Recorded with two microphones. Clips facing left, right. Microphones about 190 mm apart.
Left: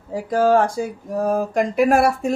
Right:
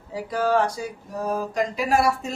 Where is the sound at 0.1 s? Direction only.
45° left (ahead or behind).